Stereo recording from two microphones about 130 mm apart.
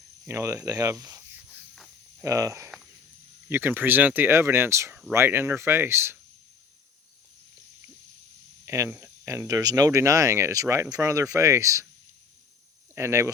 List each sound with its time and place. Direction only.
0.3 s speech: 20° right (ahead or behind)
2.2 s speech: 25° right (ahead or behind)
8.6 s speech: 20° right (ahead or behind)
13.0 s speech: 20° right (ahead or behind)